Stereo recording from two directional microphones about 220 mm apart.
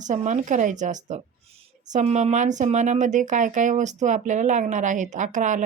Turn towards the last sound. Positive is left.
turn(degrees=-35)  # may be behind; listen again after turning